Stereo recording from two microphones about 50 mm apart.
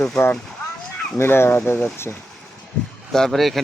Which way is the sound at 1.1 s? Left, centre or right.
Left.